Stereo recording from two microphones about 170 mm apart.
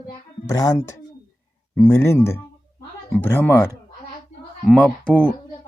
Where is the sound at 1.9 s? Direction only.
15° left (ahead or behind).